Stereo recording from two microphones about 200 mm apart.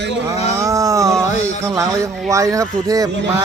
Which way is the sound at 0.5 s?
15° right (ahead or behind).